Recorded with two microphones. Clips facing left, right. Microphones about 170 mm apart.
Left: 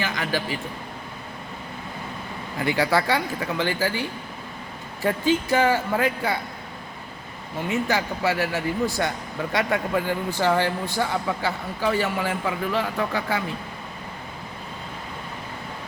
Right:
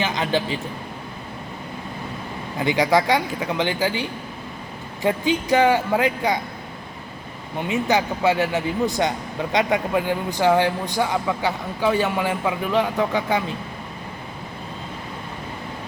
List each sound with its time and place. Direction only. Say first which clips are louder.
0.0 s a man's voice: right 4 dB; 20° right (ahead or behind)
2.6 s a man's voice: right 3 dB; 20° right (ahead or behind)
5.0 s speech: right 1 dB; 20° right (ahead or behind)
7.7 s a man's voice: right 4 dB; 20° right (ahead or behind)